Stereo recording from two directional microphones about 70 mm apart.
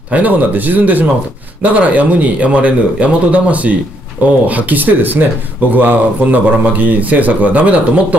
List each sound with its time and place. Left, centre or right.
0.1 s speech: right